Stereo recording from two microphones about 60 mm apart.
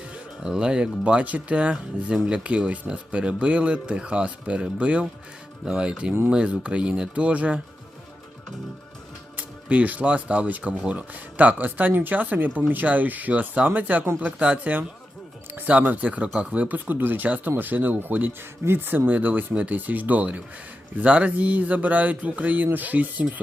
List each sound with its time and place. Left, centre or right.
0.4 s speech: centre
9.4 s speech: right